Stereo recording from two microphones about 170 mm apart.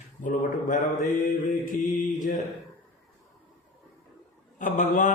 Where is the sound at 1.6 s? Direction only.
50° left (ahead or behind).